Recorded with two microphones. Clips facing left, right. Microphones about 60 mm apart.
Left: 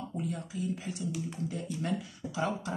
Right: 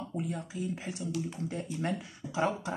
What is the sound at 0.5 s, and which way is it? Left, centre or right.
Speech, right.